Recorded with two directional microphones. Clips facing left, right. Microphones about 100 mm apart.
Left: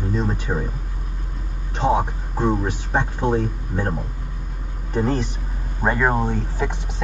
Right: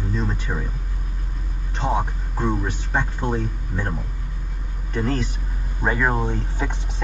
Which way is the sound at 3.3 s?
35° left (ahead or behind).